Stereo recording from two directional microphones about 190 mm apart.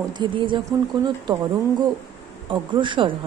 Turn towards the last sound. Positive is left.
turn(degrees=-25)  # may be behind; listen again after turning